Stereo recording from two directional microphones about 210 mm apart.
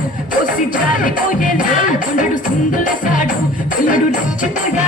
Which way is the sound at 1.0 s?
40° left (ahead or behind).